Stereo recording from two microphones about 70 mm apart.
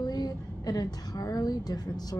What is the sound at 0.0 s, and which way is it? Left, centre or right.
A woman's voice, left.